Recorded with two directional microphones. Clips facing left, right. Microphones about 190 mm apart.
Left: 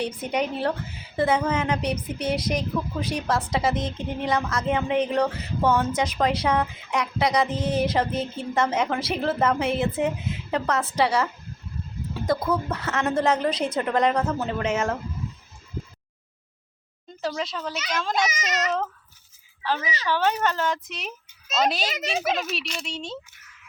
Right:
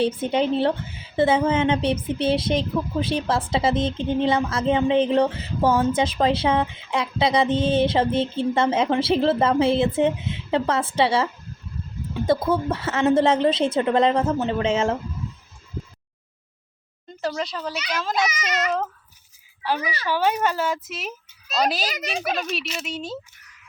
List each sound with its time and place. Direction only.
0.0 s speech: 30° right (ahead or behind)
17.1 s speech: centre (ahead or behind)
19.6 s speech: 10° right (ahead or behind)
21.8 s speech: 25° left (ahead or behind)
22.4 s speech: centre (ahead or behind)